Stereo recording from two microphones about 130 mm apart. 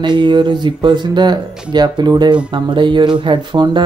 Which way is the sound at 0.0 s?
35° right (ahead or behind).